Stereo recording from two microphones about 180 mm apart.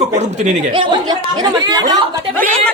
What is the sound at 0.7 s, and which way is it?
Speech, 25° right (ahead or behind).